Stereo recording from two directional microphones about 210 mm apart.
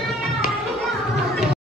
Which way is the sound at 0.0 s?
Centre (ahead or behind).